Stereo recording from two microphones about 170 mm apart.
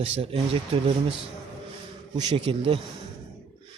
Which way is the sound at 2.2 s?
25° right (ahead or behind).